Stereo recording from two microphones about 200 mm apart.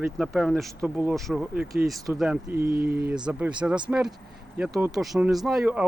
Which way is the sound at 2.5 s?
50° right (ahead or behind).